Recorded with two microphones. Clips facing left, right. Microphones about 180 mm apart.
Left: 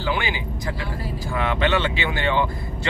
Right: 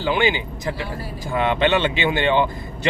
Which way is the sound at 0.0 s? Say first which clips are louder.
Right 5 dB; 20° right (ahead or behind).